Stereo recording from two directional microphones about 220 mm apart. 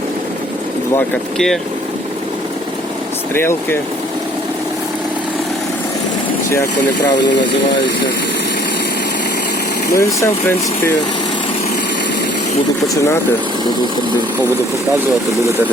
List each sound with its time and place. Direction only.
0.9 s speech: centre (ahead or behind)
3.3 s speech: 10° left (ahead or behind)
6.5 s speech: 15° left (ahead or behind)
9.9 s speech: 15° left (ahead or behind)
12.9 s speech: 15° left (ahead or behind)